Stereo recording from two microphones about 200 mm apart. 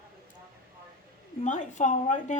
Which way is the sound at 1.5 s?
40° left (ahead or behind).